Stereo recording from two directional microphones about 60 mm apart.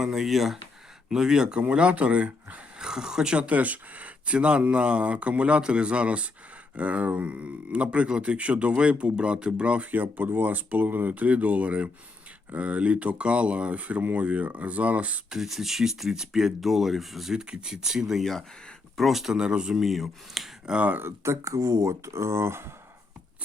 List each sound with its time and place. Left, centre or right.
0.0 s speech: centre; by 15.2 s right
15.3 s speech: centre
19.8 s speech: centre
20.7 s speech: right
21.2 s speech: right